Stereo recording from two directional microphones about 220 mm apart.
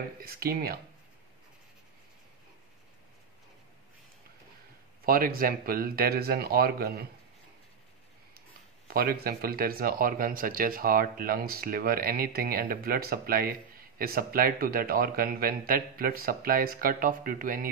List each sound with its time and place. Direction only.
0.2 s speech: 45° right (ahead or behind)
5.0 s speech: 40° right (ahead or behind)
8.8 s speech: 45° right (ahead or behind)